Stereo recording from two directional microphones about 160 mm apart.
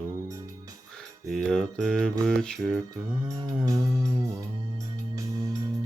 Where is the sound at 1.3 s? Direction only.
5° left (ahead or behind).